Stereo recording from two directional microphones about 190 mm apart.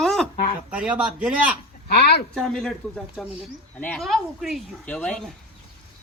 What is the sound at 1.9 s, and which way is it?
Speech, 60° left (ahead or behind).